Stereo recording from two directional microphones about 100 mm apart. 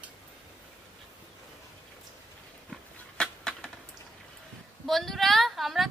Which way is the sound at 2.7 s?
5° left (ahead or behind).